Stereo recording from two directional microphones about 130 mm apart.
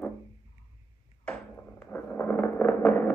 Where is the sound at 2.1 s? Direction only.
15° left (ahead or behind).